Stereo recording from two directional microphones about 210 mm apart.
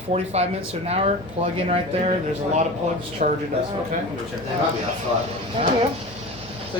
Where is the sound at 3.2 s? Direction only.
35° right (ahead or behind).